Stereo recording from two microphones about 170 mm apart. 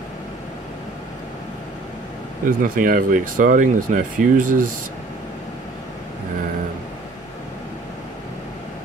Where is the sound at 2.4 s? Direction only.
55° right (ahead or behind).